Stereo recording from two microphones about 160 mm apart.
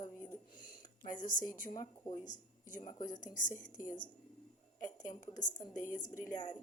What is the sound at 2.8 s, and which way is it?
Speech, 30° left (ahead or behind).